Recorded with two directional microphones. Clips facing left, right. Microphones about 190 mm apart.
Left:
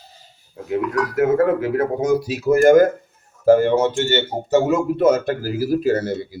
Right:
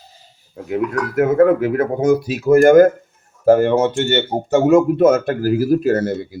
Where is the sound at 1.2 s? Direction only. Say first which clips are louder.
Right 4 dB; 55° right (ahead or behind).